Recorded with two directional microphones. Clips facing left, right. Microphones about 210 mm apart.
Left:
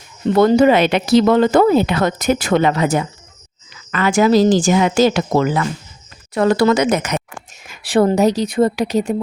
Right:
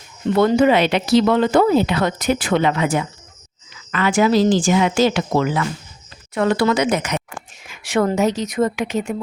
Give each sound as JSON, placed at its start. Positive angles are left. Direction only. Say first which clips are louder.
{"t": 0.3, "sound": "speech", "louder": "left 3 dB", "side_deg": 40}
{"t": 7.7, "sound": "speech", "louder": "left 4 dB", "side_deg": 35}